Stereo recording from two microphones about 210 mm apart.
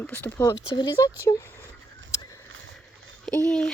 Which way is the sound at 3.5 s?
5° left (ahead or behind).